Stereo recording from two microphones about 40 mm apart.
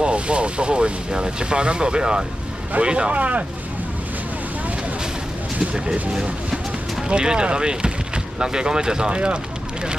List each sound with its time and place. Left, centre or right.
0.0 s speech: right
3.2 s speech: right
6.1 s a sound: centre
7.1 s speech: right